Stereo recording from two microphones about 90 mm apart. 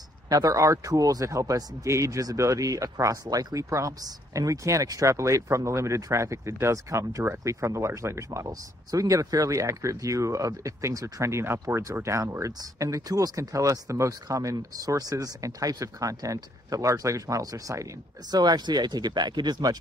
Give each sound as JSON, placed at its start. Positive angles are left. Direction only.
{"t": 0.3, "sound": "speech", "side_deg": -40}